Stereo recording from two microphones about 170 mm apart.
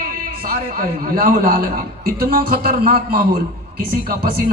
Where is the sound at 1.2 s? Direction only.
55° right (ahead or behind).